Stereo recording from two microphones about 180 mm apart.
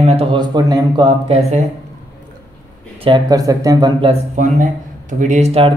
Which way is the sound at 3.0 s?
25° right (ahead or behind).